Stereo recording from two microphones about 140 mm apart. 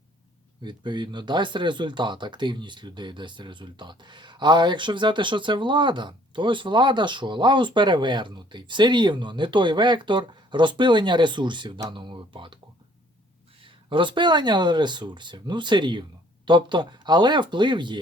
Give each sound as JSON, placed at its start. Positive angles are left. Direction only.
{"t": 0.6, "sound": "speech", "side_deg": -30}
{"t": 13.6, "sound": "speech", "side_deg": -35}